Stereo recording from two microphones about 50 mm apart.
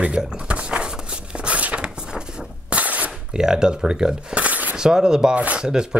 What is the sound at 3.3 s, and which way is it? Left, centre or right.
Speech, centre.